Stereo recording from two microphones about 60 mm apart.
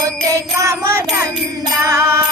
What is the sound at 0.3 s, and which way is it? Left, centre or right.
Music, right.